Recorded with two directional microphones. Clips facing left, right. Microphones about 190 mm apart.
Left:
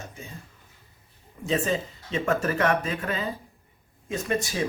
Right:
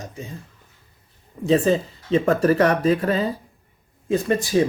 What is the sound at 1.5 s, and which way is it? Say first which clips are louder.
Speech: right 8 dB; 35° right (ahead or behind).